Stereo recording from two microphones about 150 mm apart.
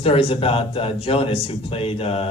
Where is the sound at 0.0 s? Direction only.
40° left (ahead or behind).